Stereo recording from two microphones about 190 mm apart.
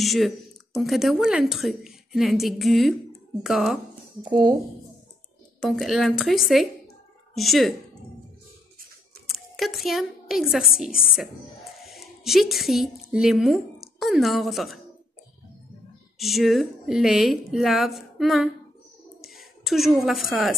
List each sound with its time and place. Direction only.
0.0 s a woman's voice: centre (ahead or behind)
4.2 s speech: 20° right (ahead or behind)
5.6 s a woman's voice: centre (ahead or behind)
9.3 s a woman's voice: centre (ahead or behind)
16.2 s a woman's voice: centre (ahead or behind)